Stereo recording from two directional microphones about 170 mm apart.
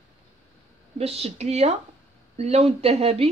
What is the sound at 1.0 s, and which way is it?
Speech, 35° right (ahead or behind).